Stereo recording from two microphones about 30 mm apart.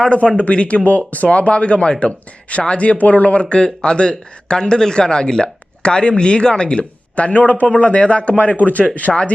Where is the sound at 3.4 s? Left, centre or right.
Left.